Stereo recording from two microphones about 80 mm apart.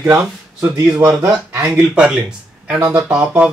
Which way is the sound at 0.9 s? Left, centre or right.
Centre.